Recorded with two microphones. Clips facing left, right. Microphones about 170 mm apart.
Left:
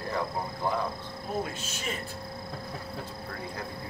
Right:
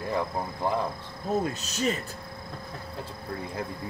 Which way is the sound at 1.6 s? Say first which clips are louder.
Right 8 dB; 40° right (ahead or behind).